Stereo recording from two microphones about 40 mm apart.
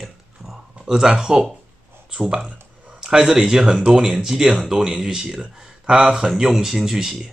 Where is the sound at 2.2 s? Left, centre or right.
Centre.